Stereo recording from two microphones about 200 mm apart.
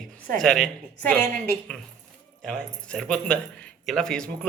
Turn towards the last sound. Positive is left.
turn(degrees=5)  # may be behind; listen again after turning